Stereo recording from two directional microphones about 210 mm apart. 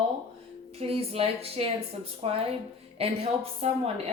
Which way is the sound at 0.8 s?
30° right (ahead or behind).